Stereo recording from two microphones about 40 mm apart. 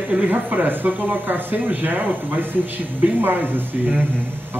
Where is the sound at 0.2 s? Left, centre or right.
Right.